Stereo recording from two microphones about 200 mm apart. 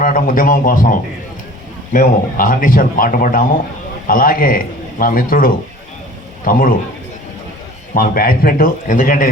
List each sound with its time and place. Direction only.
0.0 s a man's voice: 40° left (ahead or behind)
7.9 s speech: 45° left (ahead or behind)